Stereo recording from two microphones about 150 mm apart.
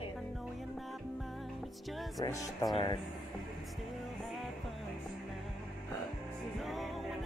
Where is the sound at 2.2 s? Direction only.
20° left (ahead or behind).